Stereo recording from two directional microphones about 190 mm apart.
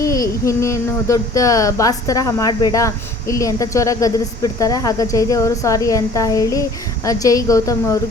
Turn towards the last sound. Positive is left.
turn(degrees=15)  # may be behind; listen again after turning